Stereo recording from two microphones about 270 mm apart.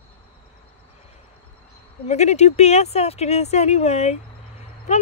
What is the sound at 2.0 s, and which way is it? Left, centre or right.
Speech, left.